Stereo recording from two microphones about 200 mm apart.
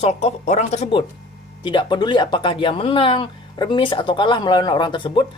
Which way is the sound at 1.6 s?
25° left (ahead or behind).